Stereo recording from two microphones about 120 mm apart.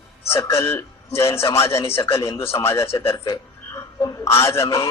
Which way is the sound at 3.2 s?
35° left (ahead or behind).